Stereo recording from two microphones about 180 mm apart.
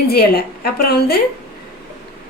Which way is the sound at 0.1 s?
60° left (ahead or behind).